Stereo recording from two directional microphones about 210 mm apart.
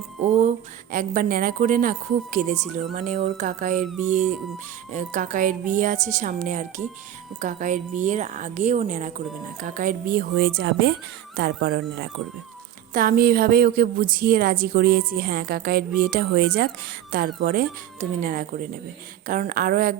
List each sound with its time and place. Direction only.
0.4 s a woman's voice: 40° right (ahead or behind)